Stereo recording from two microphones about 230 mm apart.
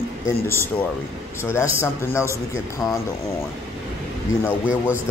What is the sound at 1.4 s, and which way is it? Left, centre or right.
Speech, centre.